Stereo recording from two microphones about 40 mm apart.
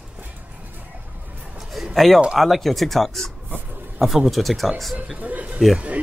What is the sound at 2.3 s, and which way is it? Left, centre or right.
Speech, centre.